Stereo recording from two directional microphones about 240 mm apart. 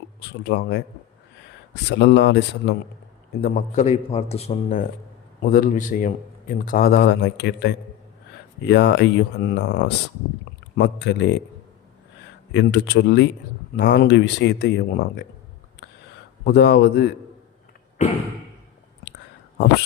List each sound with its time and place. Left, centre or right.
0.2 s speech: left
1.9 s speech: left
3.4 s a man's voice: left
12.5 s speech: left
15.8 s a sound: left
16.4 s speech: left
18.0 s speech: left